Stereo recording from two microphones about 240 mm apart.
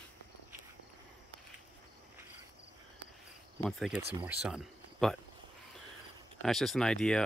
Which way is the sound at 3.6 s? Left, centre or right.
Centre.